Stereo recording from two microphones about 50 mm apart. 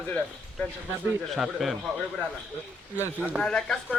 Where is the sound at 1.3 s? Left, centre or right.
Centre.